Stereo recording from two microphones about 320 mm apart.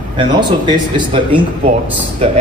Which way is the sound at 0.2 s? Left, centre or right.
Centre.